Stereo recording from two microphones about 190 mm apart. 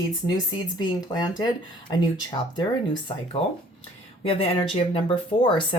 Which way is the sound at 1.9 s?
20° left (ahead or behind).